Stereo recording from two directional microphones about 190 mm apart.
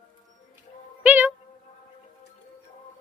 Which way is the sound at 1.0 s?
10° right (ahead or behind).